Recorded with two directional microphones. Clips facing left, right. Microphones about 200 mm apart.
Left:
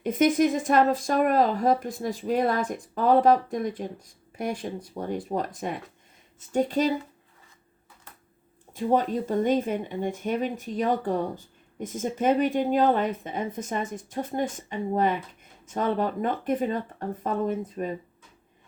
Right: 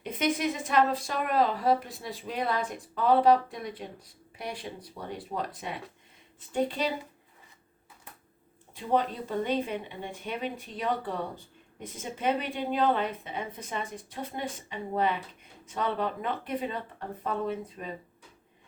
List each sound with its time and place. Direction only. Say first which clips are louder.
0.0 s speech: left 8 dB; 45° left (ahead or behind)
8.7 s speech: left 4 dB; 45° left (ahead or behind)